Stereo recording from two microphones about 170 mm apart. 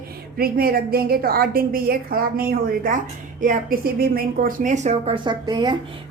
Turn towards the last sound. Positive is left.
turn(degrees=-25)  # may be behind; listen again after turning